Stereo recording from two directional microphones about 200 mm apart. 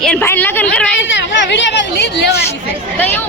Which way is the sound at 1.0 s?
65° left (ahead or behind).